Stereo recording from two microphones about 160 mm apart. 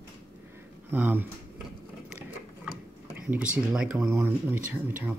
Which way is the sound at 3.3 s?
5° right (ahead or behind).